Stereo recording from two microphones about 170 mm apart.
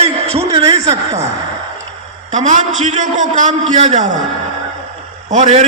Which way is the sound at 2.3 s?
45° right (ahead or behind).